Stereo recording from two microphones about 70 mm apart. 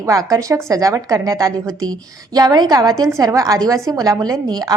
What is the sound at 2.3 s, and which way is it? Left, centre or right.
Speech, right.